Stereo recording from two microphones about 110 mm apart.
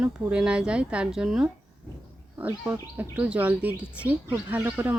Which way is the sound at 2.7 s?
20° right (ahead or behind).